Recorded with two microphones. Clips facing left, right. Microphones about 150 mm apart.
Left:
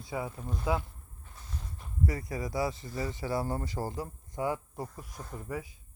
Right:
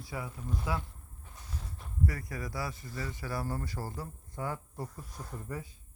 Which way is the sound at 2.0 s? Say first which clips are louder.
Left 4 dB; 20° left (ahead or behind).